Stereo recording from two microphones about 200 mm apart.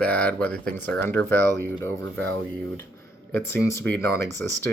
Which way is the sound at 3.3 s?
15° left (ahead or behind).